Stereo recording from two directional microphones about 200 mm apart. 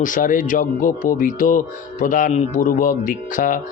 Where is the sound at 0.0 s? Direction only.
40° left (ahead or behind).